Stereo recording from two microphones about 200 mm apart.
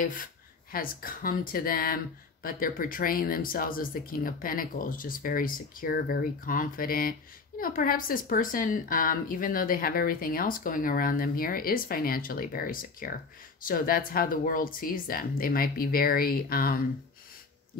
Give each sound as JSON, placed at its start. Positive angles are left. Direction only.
{"t": 0.0, "sound": "a woman's voice", "side_deg": 45}